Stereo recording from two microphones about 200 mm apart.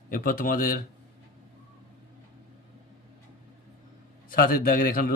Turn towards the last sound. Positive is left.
turn(degrees=45)  # may be behind; listen again after turning